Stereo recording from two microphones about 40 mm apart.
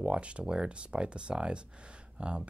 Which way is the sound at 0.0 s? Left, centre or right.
Right.